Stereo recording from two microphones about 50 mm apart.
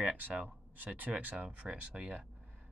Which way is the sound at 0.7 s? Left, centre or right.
Right.